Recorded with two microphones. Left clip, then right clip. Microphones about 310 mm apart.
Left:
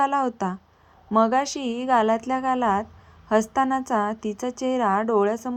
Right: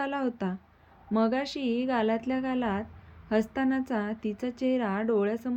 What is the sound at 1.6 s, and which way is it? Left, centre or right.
A woman's voice, left.